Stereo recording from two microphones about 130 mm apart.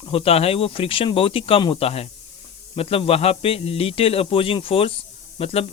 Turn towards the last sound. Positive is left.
turn(degrees=50)  # may be behind; listen again after turning